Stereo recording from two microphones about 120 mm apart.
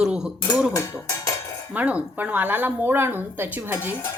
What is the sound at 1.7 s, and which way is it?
A woman's voice, 10° right (ahead or behind).